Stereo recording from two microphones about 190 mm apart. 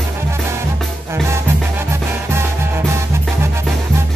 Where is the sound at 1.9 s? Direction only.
15° right (ahead or behind).